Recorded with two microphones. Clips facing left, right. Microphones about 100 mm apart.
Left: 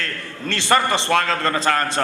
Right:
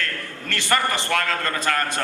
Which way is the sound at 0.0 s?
30° left (ahead or behind).